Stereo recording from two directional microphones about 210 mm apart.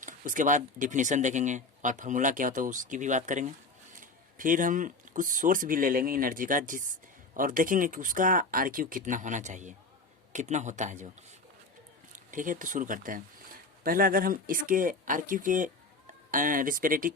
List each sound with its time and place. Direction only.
0.0 s speech: 40° right (ahead or behind)
12.1 s speech: 40° right (ahead or behind)